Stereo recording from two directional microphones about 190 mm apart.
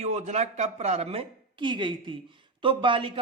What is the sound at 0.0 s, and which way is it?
Speech, 35° right (ahead or behind).